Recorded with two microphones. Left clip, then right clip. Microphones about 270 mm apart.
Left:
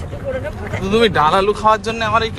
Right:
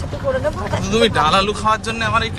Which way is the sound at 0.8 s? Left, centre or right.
Left.